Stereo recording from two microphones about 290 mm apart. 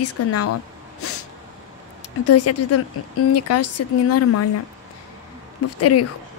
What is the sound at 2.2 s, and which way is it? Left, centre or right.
A woman's voice, left.